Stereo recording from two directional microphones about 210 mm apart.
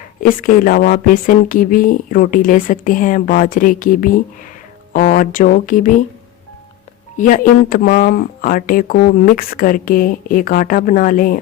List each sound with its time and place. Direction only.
0.2 s speech: 40° left (ahead or behind)
7.2 s speech: 40° left (ahead or behind)